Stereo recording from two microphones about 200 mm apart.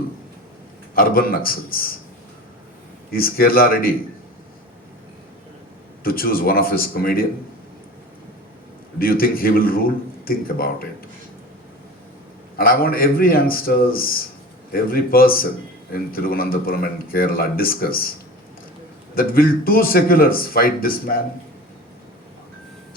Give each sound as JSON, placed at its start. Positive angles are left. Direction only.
{"t": 0.9, "sound": "speech", "side_deg": 45}
{"t": 3.1, "sound": "speech", "side_deg": 50}
{"t": 6.0, "sound": "speech", "side_deg": 45}
{"t": 9.0, "sound": "speech", "side_deg": 45}
{"t": 12.5, "sound": "speech", "side_deg": 45}
{"t": 19.1, "sound": "speech", "side_deg": 45}